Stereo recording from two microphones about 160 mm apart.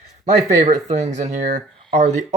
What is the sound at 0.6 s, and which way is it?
Speech, 40° right (ahead or behind).